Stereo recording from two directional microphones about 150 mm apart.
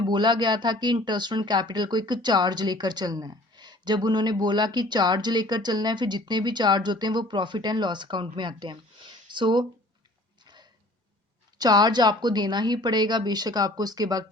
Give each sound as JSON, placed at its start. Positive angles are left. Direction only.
{"t": 0.0, "sound": "speech", "side_deg": -30}
{"t": 10.4, "sound": "a sound", "side_deg": -30}
{"t": 11.5, "sound": "speech", "side_deg": -25}